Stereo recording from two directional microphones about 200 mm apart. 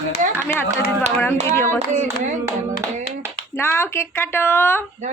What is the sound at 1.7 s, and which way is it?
Speech, 35° right (ahead or behind).